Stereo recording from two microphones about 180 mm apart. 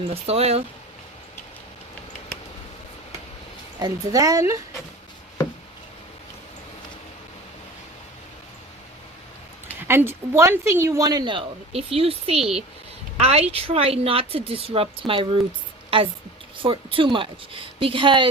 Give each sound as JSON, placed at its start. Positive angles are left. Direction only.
{"t": 0.0, "sound": "speech", "side_deg": -35}
{"t": 3.8, "sound": "speech", "side_deg": -20}
{"t": 9.8, "sound": "speech", "side_deg": -15}
{"t": 16.6, "sound": "speech", "side_deg": -30}